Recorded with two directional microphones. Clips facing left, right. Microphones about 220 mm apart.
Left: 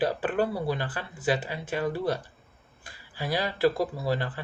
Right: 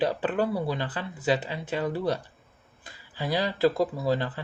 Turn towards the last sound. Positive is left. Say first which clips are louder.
# right 2 dB
turn(degrees=-20)  # may be behind; listen again after turning